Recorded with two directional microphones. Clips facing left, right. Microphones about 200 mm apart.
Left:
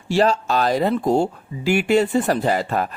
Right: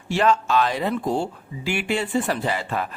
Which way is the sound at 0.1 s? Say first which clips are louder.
Left 2 dB; 35° left (ahead or behind).